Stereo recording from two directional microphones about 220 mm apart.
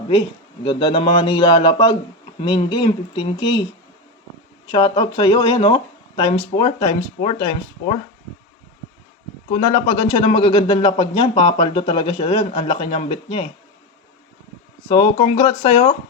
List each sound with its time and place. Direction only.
0.6 s a man's voice: 20° left (ahead or behind)
4.7 s a man's voice: 20° left (ahead or behind)
9.5 s a man's voice: 20° left (ahead or behind)
14.8 s a man's voice: 20° left (ahead or behind)